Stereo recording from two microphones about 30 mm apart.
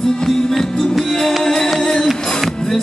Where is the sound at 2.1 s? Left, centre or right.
Centre.